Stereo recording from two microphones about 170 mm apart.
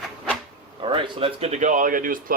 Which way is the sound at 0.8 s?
30° right (ahead or behind).